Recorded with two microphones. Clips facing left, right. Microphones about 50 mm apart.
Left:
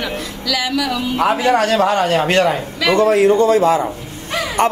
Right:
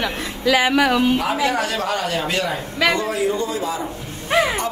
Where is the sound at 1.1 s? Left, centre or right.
Left.